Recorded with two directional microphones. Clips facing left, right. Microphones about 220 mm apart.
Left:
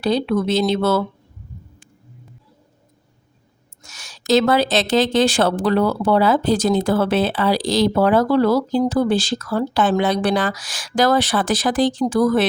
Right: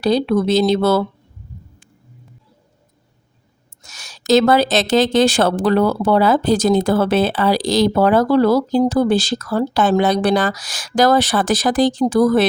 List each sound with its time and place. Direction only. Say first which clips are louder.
0.0 s speech: right 3 dB; 40° right (ahead or behind)
3.8 s speech: right 3 dB; 40° right (ahead or behind)